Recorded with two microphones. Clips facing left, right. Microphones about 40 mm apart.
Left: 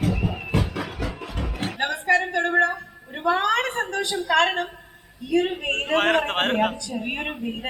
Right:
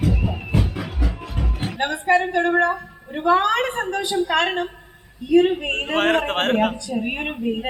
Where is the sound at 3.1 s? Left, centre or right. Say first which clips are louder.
Right 4 dB; centre.